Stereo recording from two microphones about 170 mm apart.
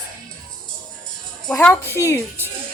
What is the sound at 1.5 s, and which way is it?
Speech, 5° left (ahead or behind).